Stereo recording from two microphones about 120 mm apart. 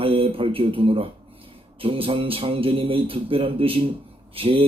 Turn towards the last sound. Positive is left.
turn(degrees=-50)  # may be behind; listen again after turning